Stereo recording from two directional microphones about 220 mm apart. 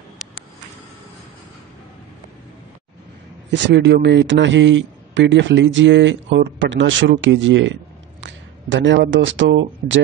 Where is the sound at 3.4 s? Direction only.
55° right (ahead or behind).